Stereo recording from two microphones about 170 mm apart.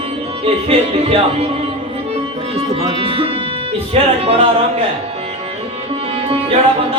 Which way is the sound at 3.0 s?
35° right (ahead or behind).